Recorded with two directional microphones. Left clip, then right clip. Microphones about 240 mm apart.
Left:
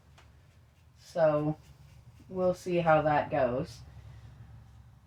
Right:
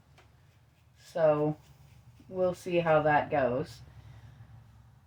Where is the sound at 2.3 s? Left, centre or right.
Right.